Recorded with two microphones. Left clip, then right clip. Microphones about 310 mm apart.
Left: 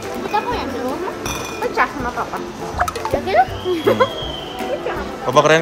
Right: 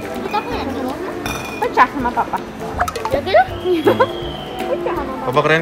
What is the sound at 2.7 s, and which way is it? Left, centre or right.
Speech, centre.